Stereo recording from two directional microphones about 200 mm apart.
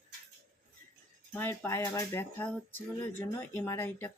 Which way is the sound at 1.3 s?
10° left (ahead or behind).